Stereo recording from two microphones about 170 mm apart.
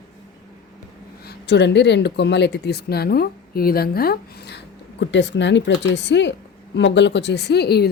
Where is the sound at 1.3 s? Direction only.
90° left.